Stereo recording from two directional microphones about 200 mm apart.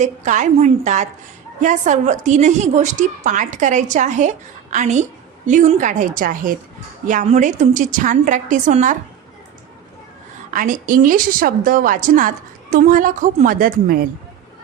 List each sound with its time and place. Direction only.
0.0 s a woman's voice: 40° right (ahead or behind)
10.5 s a woman's voice: 40° right (ahead or behind)